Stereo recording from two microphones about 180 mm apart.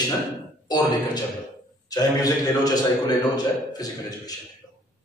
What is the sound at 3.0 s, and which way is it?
A man's voice, 20° left (ahead or behind).